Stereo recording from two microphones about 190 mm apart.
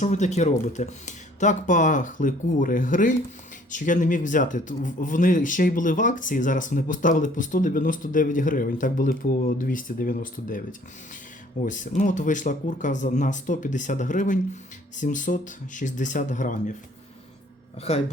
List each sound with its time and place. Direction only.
0.0 s speech: 40° left (ahead or behind)
17.9 s speech: 35° left (ahead or behind)